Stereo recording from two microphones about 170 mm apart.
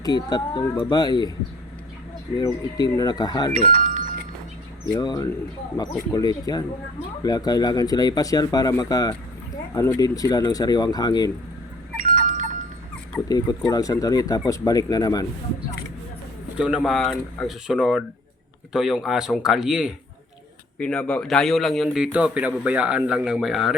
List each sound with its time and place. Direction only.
0.0 s speech: 25° left (ahead or behind)
2.4 s speech: 25° left (ahead or behind)
4.9 s speech: 25° left (ahead or behind)
12.0 s goat: 50° right (ahead or behind)
13.2 s speech: 20° left (ahead or behind)
16.6 s a man's voice: 5° right (ahead or behind)